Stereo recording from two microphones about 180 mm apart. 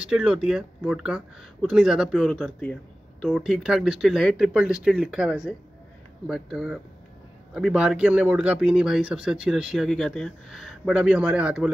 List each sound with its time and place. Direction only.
0.0 s speech: 5° right (ahead or behind)